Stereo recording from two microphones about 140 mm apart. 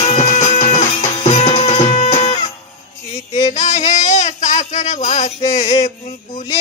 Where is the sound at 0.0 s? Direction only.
50° left (ahead or behind).